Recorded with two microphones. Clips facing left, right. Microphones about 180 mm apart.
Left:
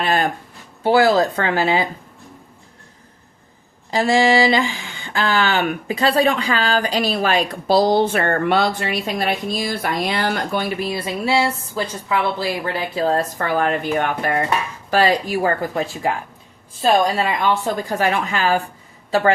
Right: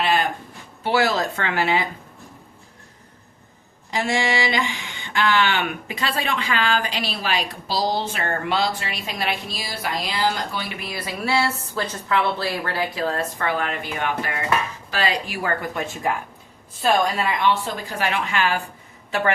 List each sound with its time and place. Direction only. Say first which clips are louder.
0.0 s a sound: left 2 dB; 45° left (ahead or behind)
0.9 s speech: left 6 dB; 35° left (ahead or behind)
3.9 s speech: left 7 dB; 35° left (ahead or behind); by 10.8 s 50° left (ahead or behind)
10.8 s a woman's voice: left 7 dB; 30° left (ahead or behind)
17.8 s speech: left 3 dB; 45° left (ahead or behind)